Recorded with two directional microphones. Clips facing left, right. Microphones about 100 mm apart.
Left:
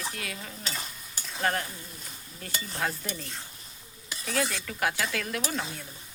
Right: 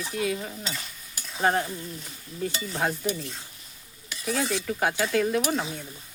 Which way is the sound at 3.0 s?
15° right (ahead or behind).